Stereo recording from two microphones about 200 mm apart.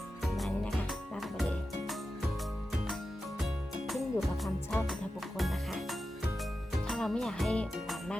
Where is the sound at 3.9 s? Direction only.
Centre (ahead or behind).